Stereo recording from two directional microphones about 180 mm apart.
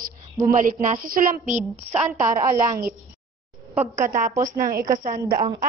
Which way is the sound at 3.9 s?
45° right (ahead or behind).